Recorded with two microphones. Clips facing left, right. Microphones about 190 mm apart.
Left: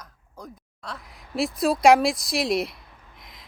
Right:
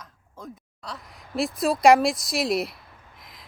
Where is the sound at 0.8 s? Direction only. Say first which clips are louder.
Even; centre (ahead or behind).